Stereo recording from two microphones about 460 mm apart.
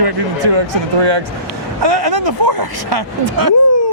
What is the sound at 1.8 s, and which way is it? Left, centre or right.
A man's voice, right.